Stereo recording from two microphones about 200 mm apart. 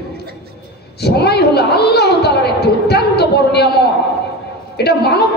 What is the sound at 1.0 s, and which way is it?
A woman's voice, 55° left (ahead or behind).